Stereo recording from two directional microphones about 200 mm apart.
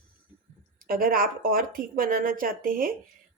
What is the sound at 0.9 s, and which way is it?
Speech, 45° right (ahead or behind).